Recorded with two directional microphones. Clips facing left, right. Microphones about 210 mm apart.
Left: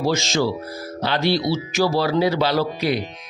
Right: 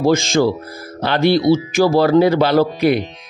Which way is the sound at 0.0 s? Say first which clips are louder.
Right 6 dB; 50° right (ahead or behind).